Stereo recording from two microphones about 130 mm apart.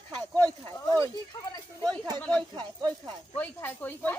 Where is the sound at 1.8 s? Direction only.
30° right (ahead or behind).